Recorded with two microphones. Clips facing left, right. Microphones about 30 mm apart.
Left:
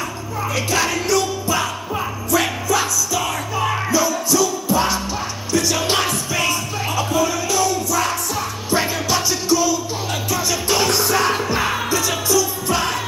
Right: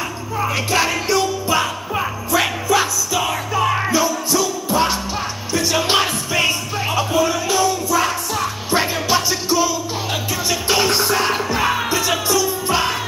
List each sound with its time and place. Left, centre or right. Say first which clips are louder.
0.7 s music: even; right; by 11.8 s centre
11.9 s music: right 1 dB; right